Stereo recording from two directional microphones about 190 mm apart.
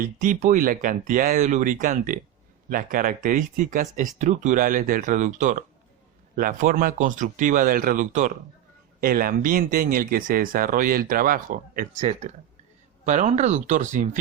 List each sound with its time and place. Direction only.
0.0 s speech: 45° right (ahead or behind)